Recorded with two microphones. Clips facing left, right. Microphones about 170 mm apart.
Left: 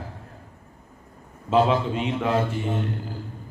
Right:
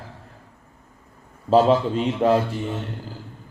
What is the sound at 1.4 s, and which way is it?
Speech, 35° right (ahead or behind).